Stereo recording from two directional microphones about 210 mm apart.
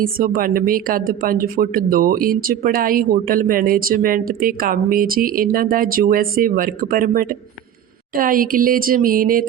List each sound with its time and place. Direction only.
0.0 s a woman's voice: 45° right (ahead or behind)